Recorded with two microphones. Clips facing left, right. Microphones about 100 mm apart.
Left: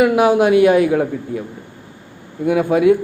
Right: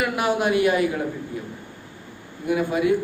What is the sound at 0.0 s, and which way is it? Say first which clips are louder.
A man's voice: left 10 dB; 90° left.